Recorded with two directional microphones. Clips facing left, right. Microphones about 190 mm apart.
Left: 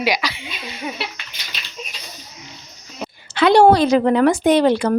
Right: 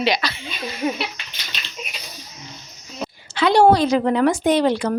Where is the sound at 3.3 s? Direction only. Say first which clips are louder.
Left 2 dB; 60° left (ahead or behind).